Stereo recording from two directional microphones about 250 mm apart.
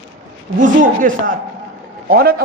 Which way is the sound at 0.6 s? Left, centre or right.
Right.